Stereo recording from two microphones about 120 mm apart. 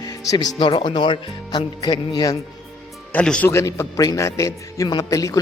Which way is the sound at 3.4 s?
20° left (ahead or behind).